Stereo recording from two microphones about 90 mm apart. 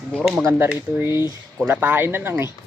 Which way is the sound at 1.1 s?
50° left (ahead or behind).